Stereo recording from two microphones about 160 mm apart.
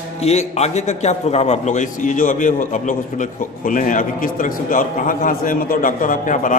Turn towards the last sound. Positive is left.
turn(degrees=50)  # may be behind; listen again after turning